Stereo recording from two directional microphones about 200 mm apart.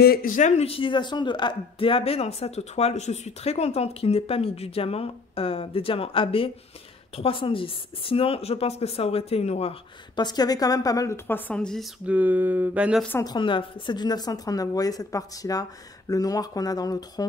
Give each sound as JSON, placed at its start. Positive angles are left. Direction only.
{"t": 0.0, "sound": "a man's voice", "side_deg": 45}
{"t": 13.1, "sound": "a man's voice", "side_deg": 20}